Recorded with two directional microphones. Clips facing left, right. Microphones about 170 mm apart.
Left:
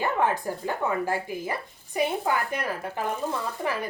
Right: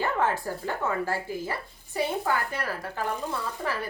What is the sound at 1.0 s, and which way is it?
Speech, 15° left (ahead or behind).